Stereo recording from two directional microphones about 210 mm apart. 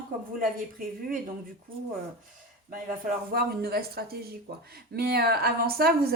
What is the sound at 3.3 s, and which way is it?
Speech, 45° right (ahead or behind).